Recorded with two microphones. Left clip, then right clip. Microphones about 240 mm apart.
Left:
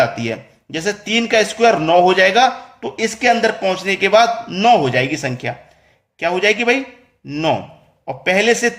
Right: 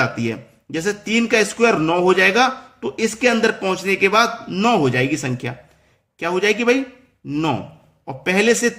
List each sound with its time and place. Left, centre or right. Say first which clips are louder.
0.0 s a man's voice: left 4 dB; centre